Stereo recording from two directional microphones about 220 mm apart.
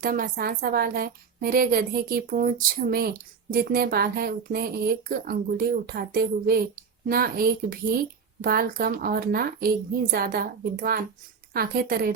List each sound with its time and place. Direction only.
0.0 s a woman's voice: 40° right (ahead or behind)